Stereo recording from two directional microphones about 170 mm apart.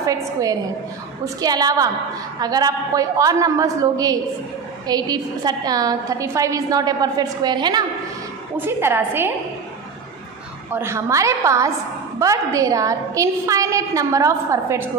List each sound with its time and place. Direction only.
0.0 s a woman's voice: 20° right (ahead or behind)
8.5 s a woman's voice: 15° right (ahead or behind)
10.7 s a woman's voice: 15° right (ahead or behind)